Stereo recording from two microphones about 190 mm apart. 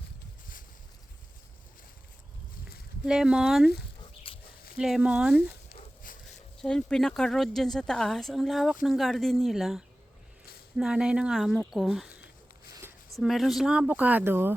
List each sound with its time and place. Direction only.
3.1 s speech: 5° right (ahead or behind)
4.3 s dog: 30° left (ahead or behind)
4.8 s speech: 5° right (ahead or behind)
6.0 s a sound: 45° left (ahead or behind)
6.6 s speech: 5° left (ahead or behind)